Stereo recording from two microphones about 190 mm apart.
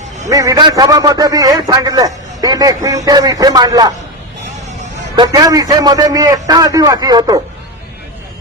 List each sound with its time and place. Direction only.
0.3 s a man's voice: 20° right (ahead or behind)
5.1 s a man's voice: 20° right (ahead or behind)